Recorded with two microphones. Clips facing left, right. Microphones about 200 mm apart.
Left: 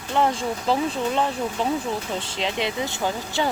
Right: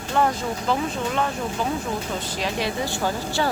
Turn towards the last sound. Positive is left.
turn(degrees=20)  # may be behind; listen again after turning